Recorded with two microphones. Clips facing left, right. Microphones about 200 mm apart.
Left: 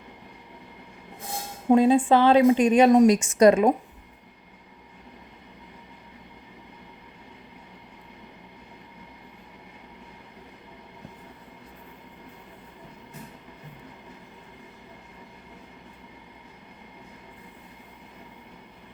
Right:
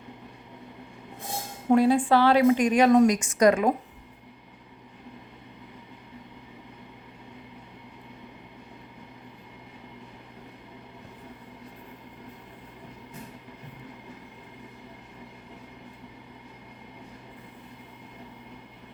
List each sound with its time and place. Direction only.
1.7 s a woman's voice: 20° left (ahead or behind)